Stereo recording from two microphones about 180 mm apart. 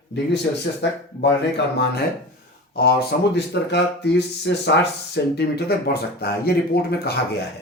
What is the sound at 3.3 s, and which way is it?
Speech, 70° left (ahead or behind).